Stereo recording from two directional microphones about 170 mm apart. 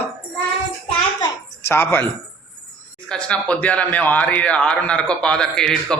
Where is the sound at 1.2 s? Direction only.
15° left (ahead or behind).